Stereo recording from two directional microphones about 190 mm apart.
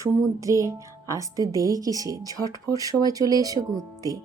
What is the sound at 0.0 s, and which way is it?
Speech, 15° right (ahead or behind).